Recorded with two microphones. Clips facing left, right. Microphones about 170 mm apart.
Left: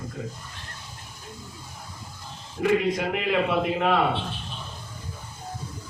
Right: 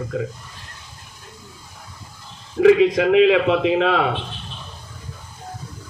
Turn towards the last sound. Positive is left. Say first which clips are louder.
# right 5 dB
turn(degrees=-90)